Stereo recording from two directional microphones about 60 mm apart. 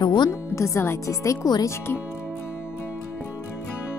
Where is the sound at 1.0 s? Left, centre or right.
Left.